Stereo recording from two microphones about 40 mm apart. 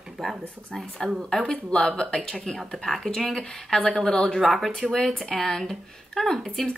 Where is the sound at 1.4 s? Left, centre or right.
Left.